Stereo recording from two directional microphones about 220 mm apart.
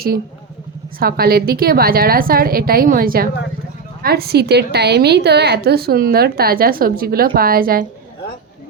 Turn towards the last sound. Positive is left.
turn(degrees=-40)  # may be behind; listen again after turning